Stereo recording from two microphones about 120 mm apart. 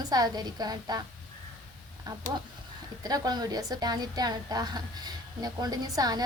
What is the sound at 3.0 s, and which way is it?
A woman's voice, 35° right (ahead or behind).